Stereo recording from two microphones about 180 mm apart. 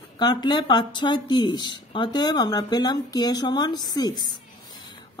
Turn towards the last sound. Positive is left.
turn(degrees=25)  # may be behind; listen again after turning